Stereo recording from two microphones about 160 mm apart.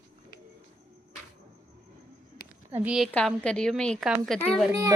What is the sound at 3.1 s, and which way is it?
Speech, 5° left (ahead or behind).